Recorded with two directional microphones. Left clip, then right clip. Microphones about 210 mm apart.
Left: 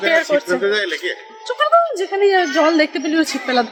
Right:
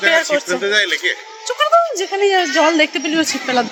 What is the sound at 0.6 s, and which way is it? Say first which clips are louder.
Speech: right 3 dB; 25° left (ahead or behind).